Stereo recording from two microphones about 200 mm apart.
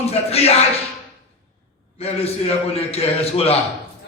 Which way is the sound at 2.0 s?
30° left (ahead or behind).